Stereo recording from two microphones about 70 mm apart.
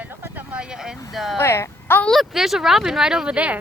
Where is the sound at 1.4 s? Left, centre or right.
Left.